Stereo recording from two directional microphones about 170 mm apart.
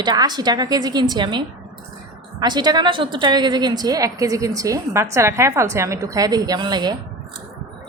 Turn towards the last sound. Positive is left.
turn(degrees=-25)  # may be behind; listen again after turning